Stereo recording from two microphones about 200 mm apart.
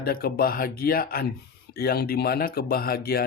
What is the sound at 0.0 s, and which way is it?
Speech, 50° left (ahead or behind).